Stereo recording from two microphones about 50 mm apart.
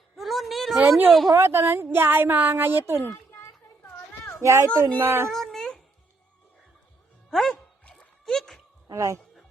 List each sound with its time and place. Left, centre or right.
0.2 s a sound: centre
0.8 s speech: right
1.4 s speech: right
4.4 s speech: right
4.9 s speech: right
5.3 s a sound: centre
7.3 s speech: centre
7.5 s dog: left
8.2 s a sound: centre